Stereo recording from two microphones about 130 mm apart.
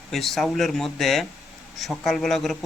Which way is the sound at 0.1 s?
Centre (ahead or behind).